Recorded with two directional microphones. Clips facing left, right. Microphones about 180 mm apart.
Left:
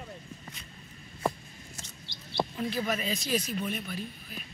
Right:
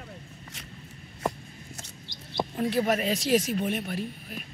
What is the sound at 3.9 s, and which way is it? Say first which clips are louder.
Speech: right 5 dB; 65° right (ahead or behind).